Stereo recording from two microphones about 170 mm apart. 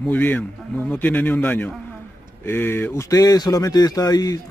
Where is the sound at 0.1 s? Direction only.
10° left (ahead or behind).